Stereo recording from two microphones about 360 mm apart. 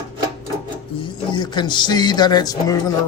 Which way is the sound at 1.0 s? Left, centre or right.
Centre.